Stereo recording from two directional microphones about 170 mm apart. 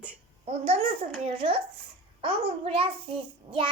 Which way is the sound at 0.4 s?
35° right (ahead or behind).